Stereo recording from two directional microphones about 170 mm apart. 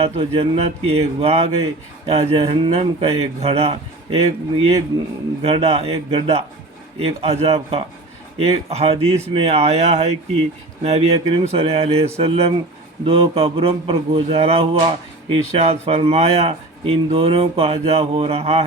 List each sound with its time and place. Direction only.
0.0 s speech: 35° right (ahead or behind)